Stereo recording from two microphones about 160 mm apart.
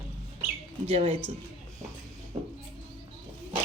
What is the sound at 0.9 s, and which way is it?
Speech, 35° right (ahead or behind).